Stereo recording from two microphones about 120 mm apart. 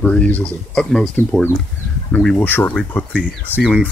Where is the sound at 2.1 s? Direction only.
10° left (ahead or behind).